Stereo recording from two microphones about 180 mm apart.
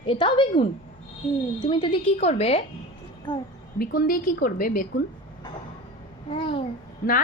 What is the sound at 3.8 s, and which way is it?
Speech, 55° left (ahead or behind).